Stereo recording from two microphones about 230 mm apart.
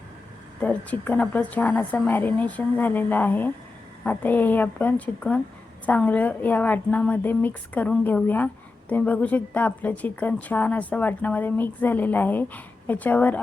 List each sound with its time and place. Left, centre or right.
0.6 s a woman's voice: centre